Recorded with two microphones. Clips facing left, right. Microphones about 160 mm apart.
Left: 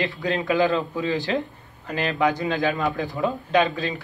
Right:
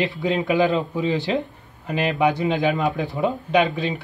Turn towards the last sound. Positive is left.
turn(degrees=-20)  # may be behind; listen again after turning